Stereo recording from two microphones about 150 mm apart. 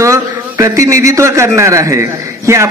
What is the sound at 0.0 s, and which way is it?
A man's voice, 20° right (ahead or behind).